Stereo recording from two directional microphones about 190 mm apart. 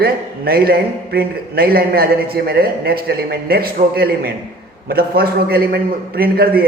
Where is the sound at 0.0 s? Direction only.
55° right (ahead or behind).